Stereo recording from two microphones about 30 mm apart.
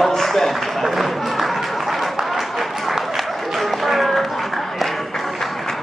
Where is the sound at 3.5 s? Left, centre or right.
Centre.